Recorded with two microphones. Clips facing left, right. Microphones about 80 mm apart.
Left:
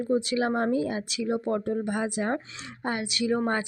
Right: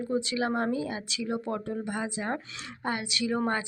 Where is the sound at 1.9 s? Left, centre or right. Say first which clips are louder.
Left 4 dB; left.